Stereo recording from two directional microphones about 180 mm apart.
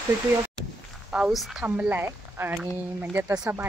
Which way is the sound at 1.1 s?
5° right (ahead or behind).